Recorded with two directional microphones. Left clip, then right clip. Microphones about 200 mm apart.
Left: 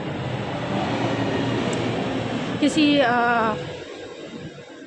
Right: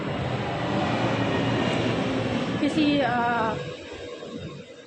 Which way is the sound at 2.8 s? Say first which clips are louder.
Left 5 dB; 50° left (ahead or behind).